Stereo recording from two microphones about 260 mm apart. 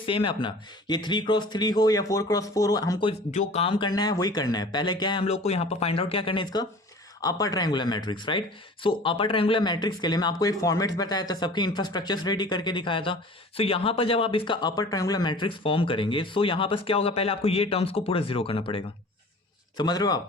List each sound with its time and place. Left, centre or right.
0.0 s speech: centre